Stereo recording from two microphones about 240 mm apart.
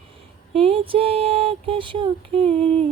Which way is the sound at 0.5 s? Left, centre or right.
Right.